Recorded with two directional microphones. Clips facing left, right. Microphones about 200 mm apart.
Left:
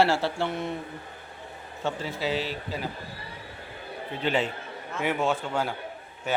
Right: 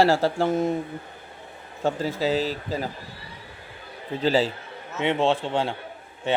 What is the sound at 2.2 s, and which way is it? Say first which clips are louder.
Speech: right 5 dB; 40° right (ahead or behind).